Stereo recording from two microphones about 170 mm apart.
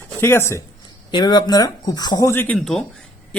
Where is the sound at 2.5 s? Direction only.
Centre (ahead or behind).